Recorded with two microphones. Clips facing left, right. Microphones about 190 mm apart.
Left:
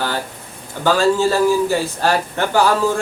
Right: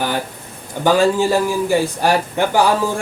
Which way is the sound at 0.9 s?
15° right (ahead or behind).